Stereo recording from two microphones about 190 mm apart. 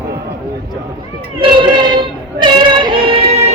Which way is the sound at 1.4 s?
25° right (ahead or behind).